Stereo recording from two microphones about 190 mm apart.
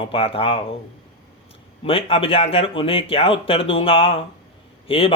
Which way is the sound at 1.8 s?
30° left (ahead or behind).